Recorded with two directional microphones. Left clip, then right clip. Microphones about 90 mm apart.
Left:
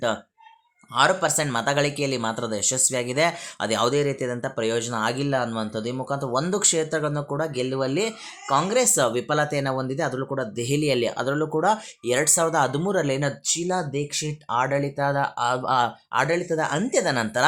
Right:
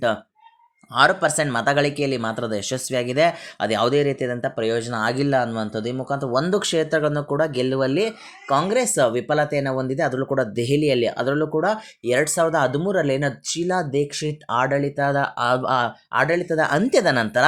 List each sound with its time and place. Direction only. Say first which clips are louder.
0.9 s speech: right 3 dB; 35° right (ahead or behind)
2.6 s speech: right 1 dB; 35° right (ahead or behind)
7.8 s speech: right 4 dB; 25° right (ahead or behind)
10.2 s speech: right 6 dB; 45° right (ahead or behind)
10.7 s speech: right 1 dB; 25° right (ahead or behind)
13.4 s speech: right 2 dB; 40° right (ahead or behind)
14.7 s speech: right 3 dB; 25° right (ahead or behind); by 17.2 s 55° right (ahead or behind)